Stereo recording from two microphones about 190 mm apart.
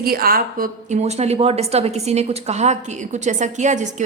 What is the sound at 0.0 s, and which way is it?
A woman's voice, 50° right (ahead or behind).